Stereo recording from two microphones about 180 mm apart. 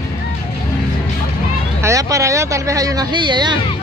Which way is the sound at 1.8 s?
15° right (ahead or behind).